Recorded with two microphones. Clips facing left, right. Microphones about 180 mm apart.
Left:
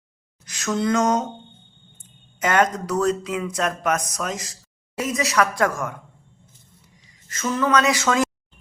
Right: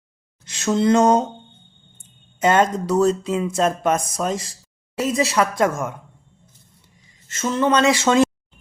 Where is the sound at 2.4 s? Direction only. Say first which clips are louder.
Right 3 dB; 25° right (ahead or behind).